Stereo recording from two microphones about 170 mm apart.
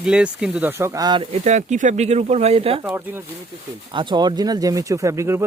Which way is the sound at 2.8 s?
10° right (ahead or behind).